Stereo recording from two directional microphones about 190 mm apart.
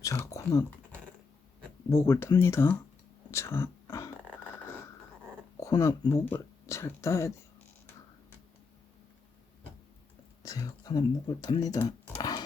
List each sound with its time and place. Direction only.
0.0 s speech: 15° left (ahead or behind)
3.3 s whispering: 15° left (ahead or behind)
5.5 s speech: 15° left (ahead or behind)
10.4 s speech: 20° left (ahead or behind)
12.1 s dog: 20° left (ahead or behind)